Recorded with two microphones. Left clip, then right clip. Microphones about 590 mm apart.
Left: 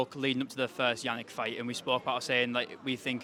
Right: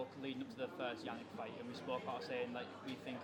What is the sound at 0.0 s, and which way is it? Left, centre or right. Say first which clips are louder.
Speech: left 14 dB; left.